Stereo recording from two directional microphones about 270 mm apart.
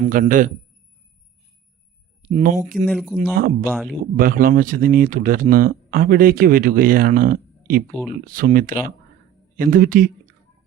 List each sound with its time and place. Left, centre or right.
0.0 s a man's voice: right
2.3 s a man's voice: right
2.8 s speech: centre
3.3 s speech: right
3.7 s speech: centre
4.2 s speech: right